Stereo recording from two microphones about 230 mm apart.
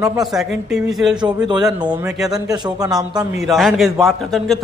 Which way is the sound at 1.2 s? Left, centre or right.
Centre.